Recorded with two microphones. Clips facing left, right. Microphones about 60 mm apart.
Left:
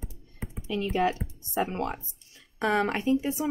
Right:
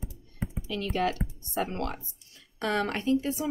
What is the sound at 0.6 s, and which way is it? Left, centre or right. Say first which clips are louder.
A woman's voice: left 3 dB; left.